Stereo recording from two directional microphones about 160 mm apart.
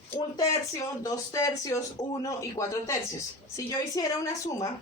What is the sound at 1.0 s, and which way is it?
A woman's voice, 20° left (ahead or behind).